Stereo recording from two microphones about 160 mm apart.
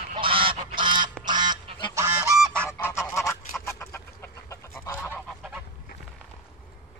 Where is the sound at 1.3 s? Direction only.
25° right (ahead or behind).